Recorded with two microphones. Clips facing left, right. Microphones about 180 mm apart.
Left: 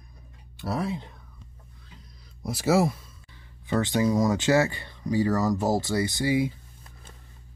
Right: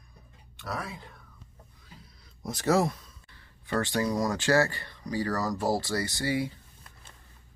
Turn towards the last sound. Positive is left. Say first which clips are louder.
# left 5 dB
turn(degrees=15)  # may be behind; listen again after turning